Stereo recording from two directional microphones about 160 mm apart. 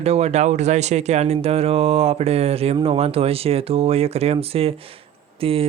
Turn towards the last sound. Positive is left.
turn(degrees=-35)  # may be behind; listen again after turning